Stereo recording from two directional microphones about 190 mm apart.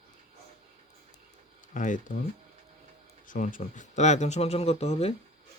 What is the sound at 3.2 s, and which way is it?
Speech, 45° left (ahead or behind).